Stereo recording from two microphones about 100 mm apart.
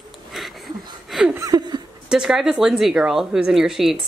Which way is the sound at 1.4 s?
40° right (ahead or behind).